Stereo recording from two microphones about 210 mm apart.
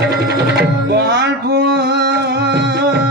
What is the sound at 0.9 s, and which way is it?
Music, 50° right (ahead or behind).